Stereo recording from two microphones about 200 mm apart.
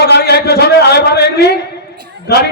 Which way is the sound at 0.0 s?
55° left (ahead or behind).